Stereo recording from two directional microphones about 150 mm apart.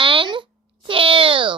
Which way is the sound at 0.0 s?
35° right (ahead or behind).